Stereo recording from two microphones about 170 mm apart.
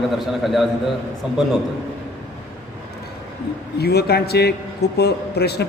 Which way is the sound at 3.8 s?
70° left (ahead or behind).